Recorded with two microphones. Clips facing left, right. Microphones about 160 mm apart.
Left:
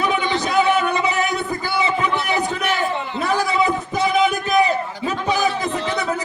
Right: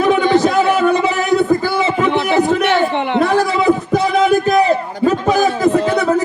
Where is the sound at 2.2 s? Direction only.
55° right (ahead or behind).